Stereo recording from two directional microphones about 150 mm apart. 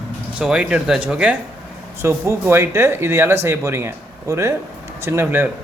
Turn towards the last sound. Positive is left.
turn(degrees=-15)  # may be behind; listen again after turning